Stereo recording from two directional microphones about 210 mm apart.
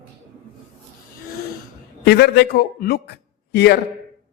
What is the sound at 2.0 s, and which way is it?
A man's voice, 50° left (ahead or behind).